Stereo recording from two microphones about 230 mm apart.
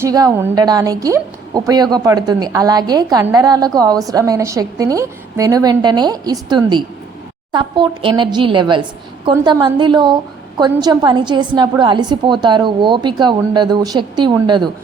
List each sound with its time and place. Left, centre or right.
0.0 s a woman's voice: centre